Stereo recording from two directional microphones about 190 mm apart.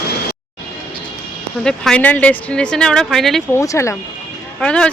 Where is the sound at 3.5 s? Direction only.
15° left (ahead or behind).